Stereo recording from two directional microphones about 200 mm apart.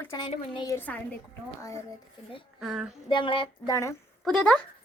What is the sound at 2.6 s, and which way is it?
Speech, centre (ahead or behind).